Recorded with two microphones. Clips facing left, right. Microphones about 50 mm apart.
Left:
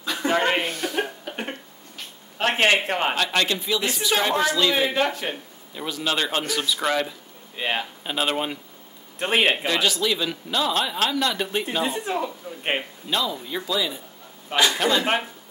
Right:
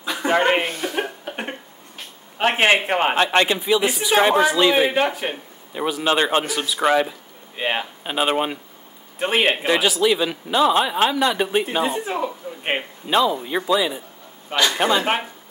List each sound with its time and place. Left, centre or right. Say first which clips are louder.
0.0 s a sound: right 3 dB; right
2.3 s a man's voice: right 3 dB; right
6.4 s speech: right 4 dB; centre
9.2 s a man's voice: right 2 dB; centre
12.0 s speech: right 2 dB; centre
13.0 s a man's voice: right 7 dB; right